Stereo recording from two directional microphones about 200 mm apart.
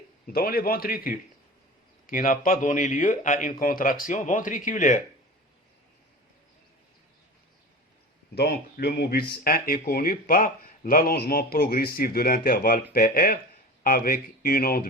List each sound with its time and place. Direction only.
0.3 s a man's voice: 50° left (ahead or behind)
8.4 s speech: 50° left (ahead or behind)